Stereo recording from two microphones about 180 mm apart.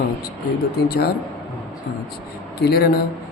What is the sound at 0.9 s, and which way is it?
Speech, 60° left (ahead or behind).